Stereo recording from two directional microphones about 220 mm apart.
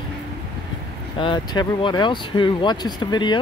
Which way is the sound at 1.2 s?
20° left (ahead or behind).